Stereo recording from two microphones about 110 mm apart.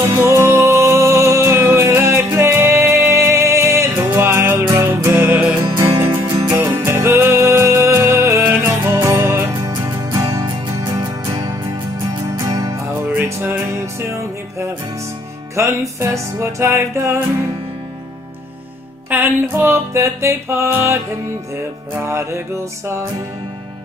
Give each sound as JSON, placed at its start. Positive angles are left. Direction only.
{"t": 0.0, "sound": "music", "side_deg": -25}
{"t": 6.0, "sound": "music", "side_deg": -45}
{"t": 6.5, "sound": "music", "side_deg": -25}
{"t": 13.2, "sound": "music", "side_deg": -20}
{"t": 15.5, "sound": "music", "side_deg": -25}
{"t": 19.5, "sound": "music", "side_deg": -20}